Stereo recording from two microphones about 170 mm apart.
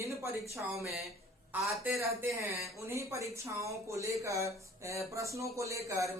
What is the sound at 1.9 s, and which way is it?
Speech, 15° right (ahead or behind).